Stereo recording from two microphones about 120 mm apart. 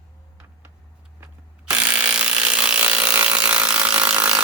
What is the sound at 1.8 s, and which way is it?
Ratchet, 10° right (ahead or behind).